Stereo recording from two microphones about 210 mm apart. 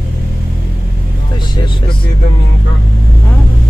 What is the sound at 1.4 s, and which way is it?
Speech, 25° left (ahead or behind).